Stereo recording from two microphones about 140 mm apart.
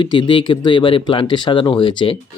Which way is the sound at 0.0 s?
35° left (ahead or behind).